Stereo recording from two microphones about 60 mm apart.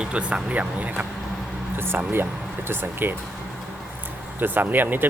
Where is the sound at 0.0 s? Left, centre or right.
Centre.